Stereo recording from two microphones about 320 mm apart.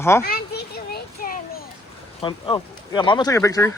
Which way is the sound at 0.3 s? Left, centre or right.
Left.